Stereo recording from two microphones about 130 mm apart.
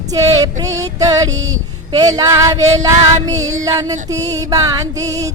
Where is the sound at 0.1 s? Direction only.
30° right (ahead or behind).